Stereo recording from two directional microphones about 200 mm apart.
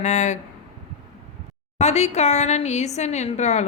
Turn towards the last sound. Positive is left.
turn(degrees=35)  # may be behind; listen again after turning